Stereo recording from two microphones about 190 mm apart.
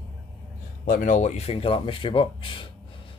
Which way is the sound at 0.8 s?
45° left (ahead or behind).